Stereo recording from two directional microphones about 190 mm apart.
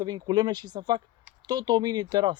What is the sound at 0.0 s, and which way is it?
Speech, 20° right (ahead or behind).